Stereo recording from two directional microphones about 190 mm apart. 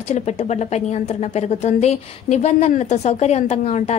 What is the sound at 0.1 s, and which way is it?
A woman's voice, 35° left (ahead or behind).